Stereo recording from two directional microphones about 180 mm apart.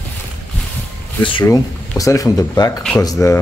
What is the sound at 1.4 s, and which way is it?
Speech, 20° left (ahead or behind).